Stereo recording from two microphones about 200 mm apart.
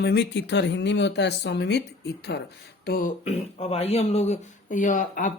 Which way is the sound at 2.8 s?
45° left (ahead or behind).